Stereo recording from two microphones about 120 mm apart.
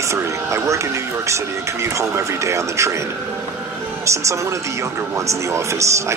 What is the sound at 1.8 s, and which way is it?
Speech, 25° right (ahead or behind).